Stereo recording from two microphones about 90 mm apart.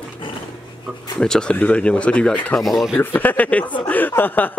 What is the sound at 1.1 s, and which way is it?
Speech, 5° left (ahead or behind).